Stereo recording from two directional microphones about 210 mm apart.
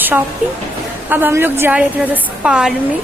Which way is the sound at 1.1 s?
10° right (ahead or behind).